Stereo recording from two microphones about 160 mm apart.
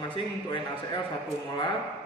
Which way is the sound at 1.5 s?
30° left (ahead or behind).